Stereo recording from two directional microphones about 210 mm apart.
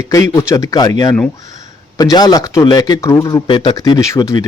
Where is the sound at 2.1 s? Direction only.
20° left (ahead or behind).